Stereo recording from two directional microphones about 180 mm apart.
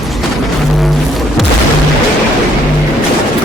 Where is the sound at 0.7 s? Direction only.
Centre (ahead or behind).